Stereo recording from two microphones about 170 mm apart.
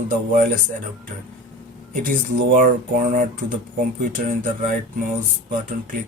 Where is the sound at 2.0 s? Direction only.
55° right (ahead or behind).